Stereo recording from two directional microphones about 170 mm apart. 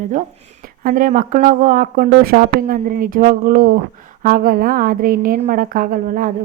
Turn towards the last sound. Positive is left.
turn(degrees=-55)  # may be behind; listen again after turning